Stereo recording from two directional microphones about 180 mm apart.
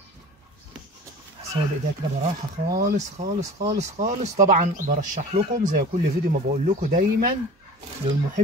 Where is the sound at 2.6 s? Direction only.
55° right (ahead or behind).